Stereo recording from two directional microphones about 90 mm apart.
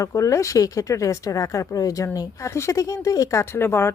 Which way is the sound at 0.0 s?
35° left (ahead or behind).